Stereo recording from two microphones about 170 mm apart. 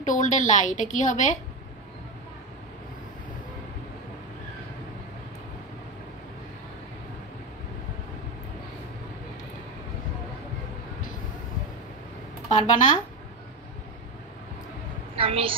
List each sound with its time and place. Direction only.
0.0 s a woman's voice: 50° left (ahead or behind)
12.4 s speech: 45° left (ahead or behind)
15.1 s a woman's voice: 30° right (ahead or behind)